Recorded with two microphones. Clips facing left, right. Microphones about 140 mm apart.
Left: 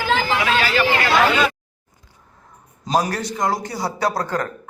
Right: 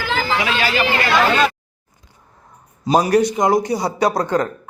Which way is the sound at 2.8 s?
10° right (ahead or behind).